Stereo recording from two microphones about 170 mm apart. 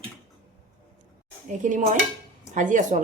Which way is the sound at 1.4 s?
50° right (ahead or behind).